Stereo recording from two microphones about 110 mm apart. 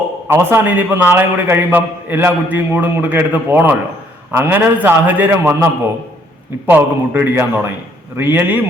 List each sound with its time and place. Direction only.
0.3 s a man's voice: 20° right (ahead or behind)
6.7 s a man's voice: 15° right (ahead or behind)